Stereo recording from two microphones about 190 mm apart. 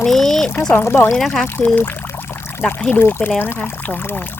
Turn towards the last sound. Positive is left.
turn(degrees=10)  # may be behind; listen again after turning